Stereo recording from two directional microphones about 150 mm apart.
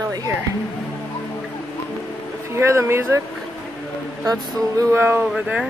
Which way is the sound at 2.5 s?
20° right (ahead or behind).